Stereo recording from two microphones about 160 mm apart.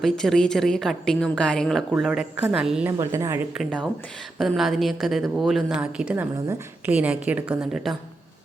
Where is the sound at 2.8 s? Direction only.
15° right (ahead or behind).